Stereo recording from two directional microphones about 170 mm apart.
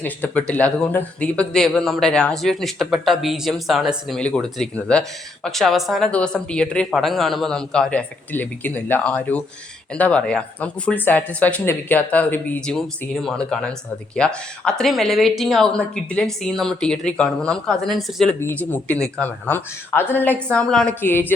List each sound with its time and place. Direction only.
0.0 s speech: 10° left (ahead or behind)
18.3 s speech: 10° left (ahead or behind)